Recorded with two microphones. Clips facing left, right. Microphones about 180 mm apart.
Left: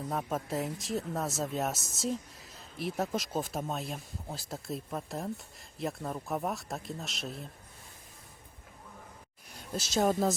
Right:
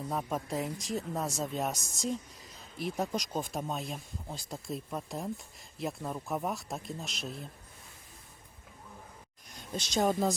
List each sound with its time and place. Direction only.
0.1 s speech: centre (ahead or behind)
9.5 s speech: 5° left (ahead or behind)